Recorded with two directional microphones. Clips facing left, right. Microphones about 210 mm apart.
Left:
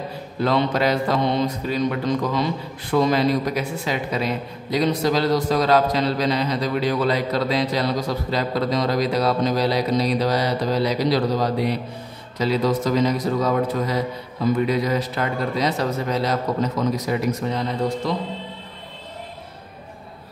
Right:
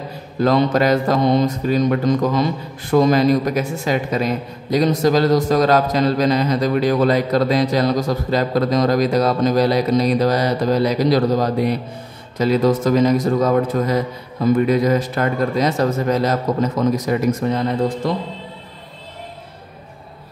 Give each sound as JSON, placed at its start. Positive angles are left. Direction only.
{"t": 0.4, "sound": "a man's voice", "side_deg": -45}